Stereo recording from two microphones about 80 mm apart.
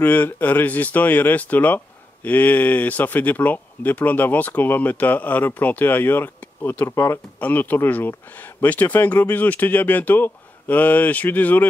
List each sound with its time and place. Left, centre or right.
0.0 s speech: left